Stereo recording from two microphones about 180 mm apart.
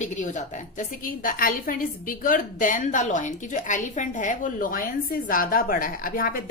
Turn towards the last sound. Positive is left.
turn(degrees=50)  # may be behind; listen again after turning